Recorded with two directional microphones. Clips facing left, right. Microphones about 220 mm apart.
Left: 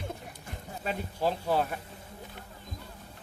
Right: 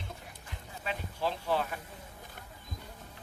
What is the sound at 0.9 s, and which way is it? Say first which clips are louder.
Speech: left 4 dB; 40° left (ahead or behind).